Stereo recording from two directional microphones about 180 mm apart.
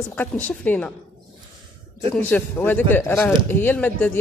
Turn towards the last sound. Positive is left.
turn(degrees=10)  # may be behind; listen again after turning